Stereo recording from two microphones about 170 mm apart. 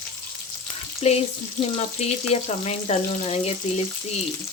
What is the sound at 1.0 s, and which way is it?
Frying, 40° left (ahead or behind).